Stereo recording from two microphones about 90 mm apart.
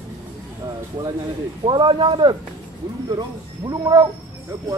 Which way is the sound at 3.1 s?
50° right (ahead or behind).